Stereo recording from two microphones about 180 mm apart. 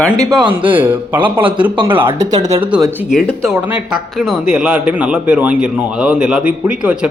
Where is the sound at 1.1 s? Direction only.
30° right (ahead or behind).